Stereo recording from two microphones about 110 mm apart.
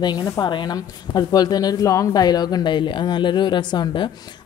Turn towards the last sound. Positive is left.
turn(degrees=45)  # may be behind; listen again after turning